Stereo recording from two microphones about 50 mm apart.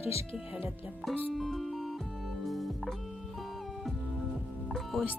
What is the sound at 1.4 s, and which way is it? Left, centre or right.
Speech, centre.